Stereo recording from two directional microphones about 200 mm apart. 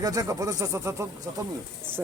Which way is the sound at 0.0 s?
15° right (ahead or behind).